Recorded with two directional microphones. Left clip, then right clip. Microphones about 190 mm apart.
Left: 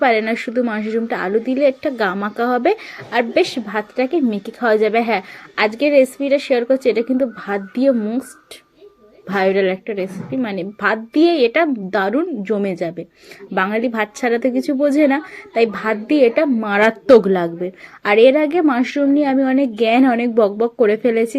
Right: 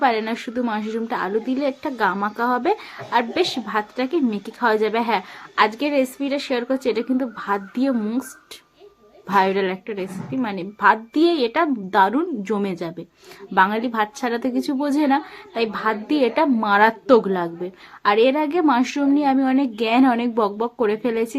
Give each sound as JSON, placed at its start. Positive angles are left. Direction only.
{"t": 0.0, "sound": "a woman's voice", "side_deg": 10}
{"t": 9.2, "sound": "a woman's voice", "side_deg": 10}